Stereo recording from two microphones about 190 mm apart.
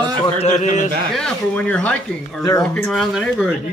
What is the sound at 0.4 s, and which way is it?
Speech, 40° left (ahead or behind).